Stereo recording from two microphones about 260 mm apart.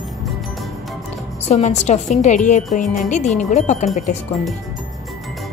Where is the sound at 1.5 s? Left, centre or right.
Left.